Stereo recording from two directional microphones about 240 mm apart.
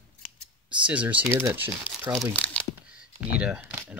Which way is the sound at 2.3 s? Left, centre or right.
Centre.